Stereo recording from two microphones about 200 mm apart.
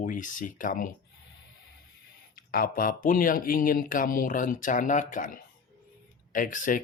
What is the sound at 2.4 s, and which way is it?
Speech, 45° left (ahead or behind).